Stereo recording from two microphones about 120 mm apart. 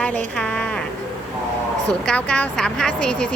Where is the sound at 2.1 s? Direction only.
10° left (ahead or behind).